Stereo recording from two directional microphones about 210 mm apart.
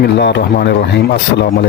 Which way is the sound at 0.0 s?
55° left (ahead or behind).